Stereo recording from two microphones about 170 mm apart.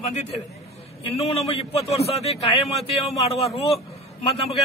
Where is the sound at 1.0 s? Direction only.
35° left (ahead or behind).